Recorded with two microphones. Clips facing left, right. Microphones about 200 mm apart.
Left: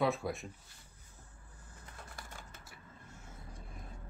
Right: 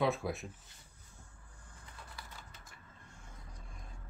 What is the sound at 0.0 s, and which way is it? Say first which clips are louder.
Speech: even; centre (ahead or behind).